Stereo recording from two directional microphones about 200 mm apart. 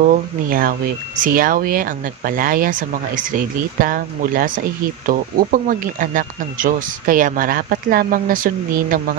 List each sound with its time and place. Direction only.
0.0 s speech: 45° right (ahead or behind)